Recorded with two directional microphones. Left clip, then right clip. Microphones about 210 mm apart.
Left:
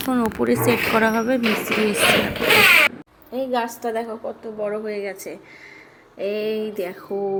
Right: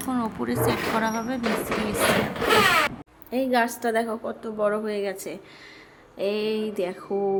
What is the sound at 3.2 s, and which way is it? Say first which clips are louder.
Speech: even; 20° right (ahead or behind).